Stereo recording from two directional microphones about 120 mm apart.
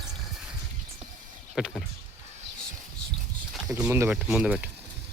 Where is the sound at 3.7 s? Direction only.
10° right (ahead or behind).